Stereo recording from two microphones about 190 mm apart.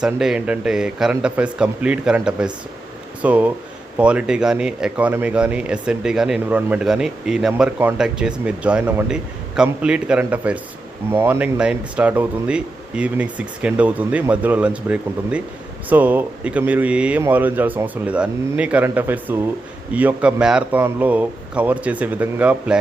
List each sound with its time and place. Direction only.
0.0 s speech: 5° right (ahead or behind)